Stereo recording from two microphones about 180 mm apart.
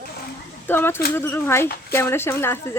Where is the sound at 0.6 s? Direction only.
10° left (ahead or behind).